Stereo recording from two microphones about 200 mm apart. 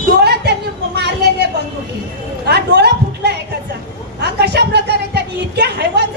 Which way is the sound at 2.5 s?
55° right (ahead or behind).